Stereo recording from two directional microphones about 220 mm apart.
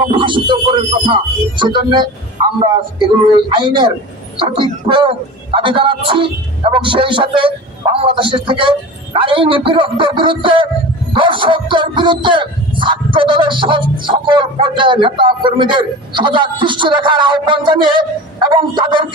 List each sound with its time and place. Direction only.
0.0 s speech: 20° right (ahead or behind)